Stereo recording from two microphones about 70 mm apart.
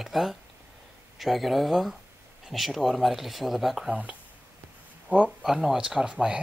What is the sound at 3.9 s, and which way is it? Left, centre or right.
Speech, centre.